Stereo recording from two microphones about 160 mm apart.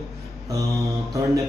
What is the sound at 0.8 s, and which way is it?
Speech, 20° right (ahead or behind).